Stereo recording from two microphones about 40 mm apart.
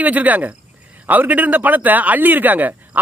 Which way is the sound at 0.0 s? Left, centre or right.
Right.